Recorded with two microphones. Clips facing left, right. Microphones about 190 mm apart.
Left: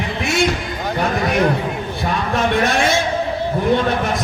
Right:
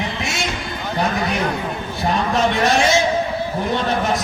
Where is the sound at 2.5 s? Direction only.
55° left (ahead or behind).